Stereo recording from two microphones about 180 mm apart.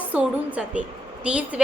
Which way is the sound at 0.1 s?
5° right (ahead or behind).